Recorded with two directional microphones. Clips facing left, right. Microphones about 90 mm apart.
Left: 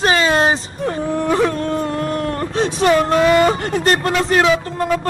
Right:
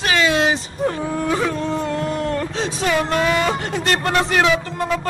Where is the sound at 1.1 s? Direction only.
55° left (ahead or behind).